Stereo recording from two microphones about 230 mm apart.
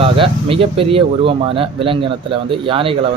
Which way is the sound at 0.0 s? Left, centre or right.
Right.